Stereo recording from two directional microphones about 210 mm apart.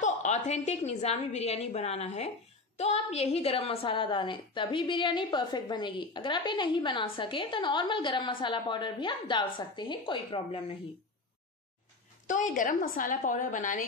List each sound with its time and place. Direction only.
0.0 s a woman's voice: 35° left (ahead or behind)
12.3 s a woman's voice: 35° left (ahead or behind)